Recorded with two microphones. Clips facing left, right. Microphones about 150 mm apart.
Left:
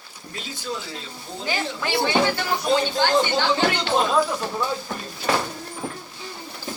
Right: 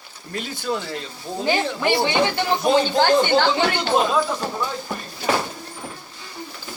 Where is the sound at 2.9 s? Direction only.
60° right (ahead or behind).